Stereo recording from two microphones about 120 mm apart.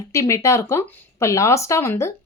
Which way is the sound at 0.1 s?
25° left (ahead or behind).